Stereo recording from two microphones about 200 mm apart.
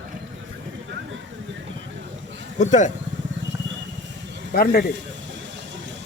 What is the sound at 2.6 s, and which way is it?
Speech, 35° left (ahead or behind).